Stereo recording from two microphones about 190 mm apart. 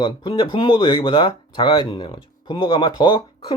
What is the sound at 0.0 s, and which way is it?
Speech, 25° left (ahead or behind).